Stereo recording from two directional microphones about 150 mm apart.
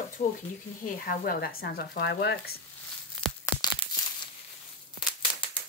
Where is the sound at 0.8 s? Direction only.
85° left.